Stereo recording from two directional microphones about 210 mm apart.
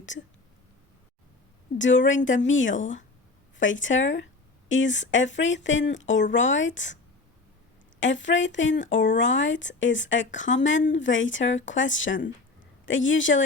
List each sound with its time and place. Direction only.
0.1 s speech: 35° left (ahead or behind)
1.8 s a woman's voice: 65° left (ahead or behind)